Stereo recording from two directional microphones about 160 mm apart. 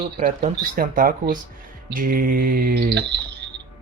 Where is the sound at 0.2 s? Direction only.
55° right (ahead or behind).